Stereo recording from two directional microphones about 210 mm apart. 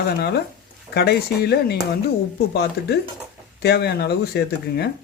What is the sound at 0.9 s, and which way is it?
Speech, 50° left (ahead or behind).